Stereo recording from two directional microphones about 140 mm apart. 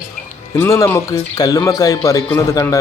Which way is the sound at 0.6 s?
20° left (ahead or behind).